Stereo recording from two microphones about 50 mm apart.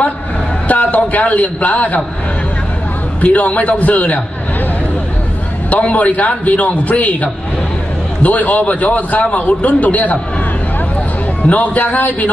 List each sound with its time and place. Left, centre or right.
0.7 s a man's voice: left
3.2 s a man's voice: left
5.7 s a man's voice: left
11.4 s a man's voice: left